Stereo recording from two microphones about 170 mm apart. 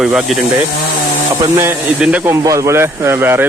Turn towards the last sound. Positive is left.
turn(degrees=-15)  # may be behind; listen again after turning